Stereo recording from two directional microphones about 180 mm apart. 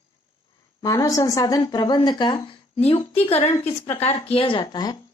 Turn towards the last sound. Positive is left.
turn(degrees=25)  # may be behind; listen again after turning